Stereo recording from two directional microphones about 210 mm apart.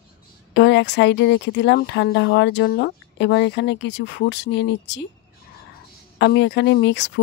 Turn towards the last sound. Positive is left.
turn(degrees=55)  # may be behind; listen again after turning